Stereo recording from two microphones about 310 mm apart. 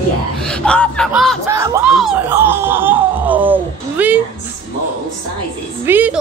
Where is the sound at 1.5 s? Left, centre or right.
Centre.